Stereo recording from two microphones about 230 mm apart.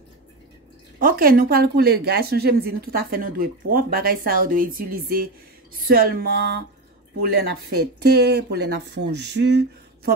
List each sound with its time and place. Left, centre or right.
0.9 s a woman's voice: right